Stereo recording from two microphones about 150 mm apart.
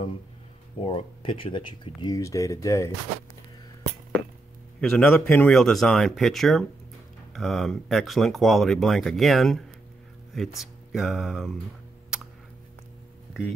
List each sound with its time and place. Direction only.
0.8 s speech: 35° left (ahead or behind); by 2.9 s 20° left (ahead or behind)
4.7 s speech: 5° left (ahead or behind)
13.3 s speech: 5° right (ahead or behind)